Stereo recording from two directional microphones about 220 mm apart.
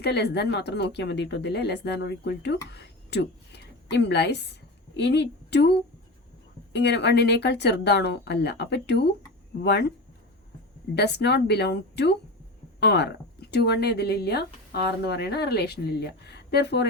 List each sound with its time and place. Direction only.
0.0 s a woman's voice: 50° left (ahead or behind)
6.7 s speech: 50° left (ahead or behind)
10.9 s speech: 50° left (ahead or behind)